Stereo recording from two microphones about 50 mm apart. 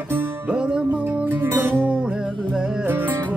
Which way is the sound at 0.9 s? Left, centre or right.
Right.